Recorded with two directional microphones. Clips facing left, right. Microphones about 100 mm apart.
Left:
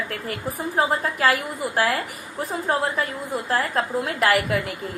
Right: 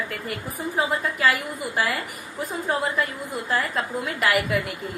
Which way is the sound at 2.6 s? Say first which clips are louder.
Left 1 dB; 50° left (ahead or behind).